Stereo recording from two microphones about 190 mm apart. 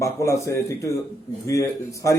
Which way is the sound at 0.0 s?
15° left (ahead or behind).